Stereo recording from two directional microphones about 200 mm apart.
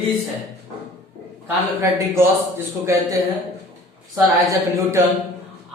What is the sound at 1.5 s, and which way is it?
A woman's voice, 10° right (ahead or behind).